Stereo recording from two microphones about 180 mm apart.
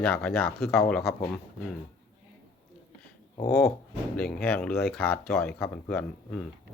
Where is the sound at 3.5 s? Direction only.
60° left (ahead or behind).